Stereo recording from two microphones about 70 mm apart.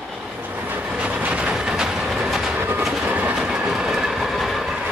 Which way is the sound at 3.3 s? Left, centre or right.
Centre.